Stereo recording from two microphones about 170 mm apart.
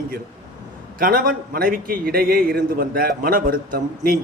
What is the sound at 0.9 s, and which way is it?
A man's voice, 55° right (ahead or behind).